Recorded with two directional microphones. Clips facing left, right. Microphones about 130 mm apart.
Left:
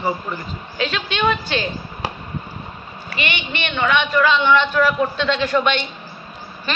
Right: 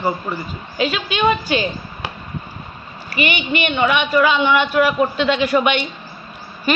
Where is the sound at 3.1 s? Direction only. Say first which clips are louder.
Right 6 dB; 10° right (ahead or behind).